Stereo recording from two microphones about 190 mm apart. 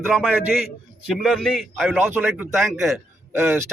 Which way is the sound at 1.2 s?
Centre (ahead or behind).